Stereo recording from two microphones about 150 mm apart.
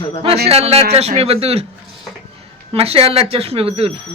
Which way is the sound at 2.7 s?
40° right (ahead or behind).